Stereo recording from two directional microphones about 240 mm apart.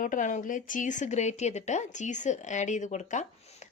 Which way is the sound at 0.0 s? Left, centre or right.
Left.